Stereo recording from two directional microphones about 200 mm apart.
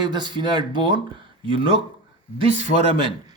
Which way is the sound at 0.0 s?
20° right (ahead or behind).